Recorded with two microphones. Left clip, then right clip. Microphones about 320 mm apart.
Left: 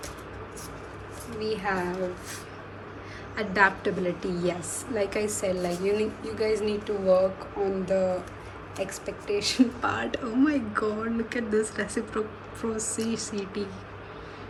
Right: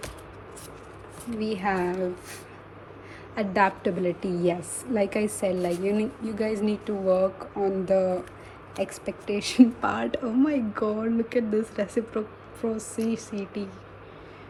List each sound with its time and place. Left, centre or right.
1.4 s a woman's voice: centre
3.3 s a woman's voice: centre